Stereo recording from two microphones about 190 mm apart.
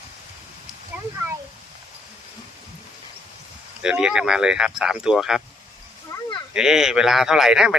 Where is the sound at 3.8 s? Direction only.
5° right (ahead or behind).